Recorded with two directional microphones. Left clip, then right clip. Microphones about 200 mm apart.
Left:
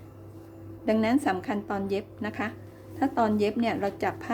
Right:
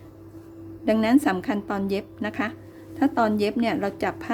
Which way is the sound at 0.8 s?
20° right (ahead or behind).